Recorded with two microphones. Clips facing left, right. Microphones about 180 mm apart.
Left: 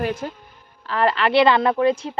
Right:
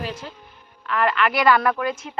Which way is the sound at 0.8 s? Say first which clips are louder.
Left 2 dB; 30° left (ahead or behind).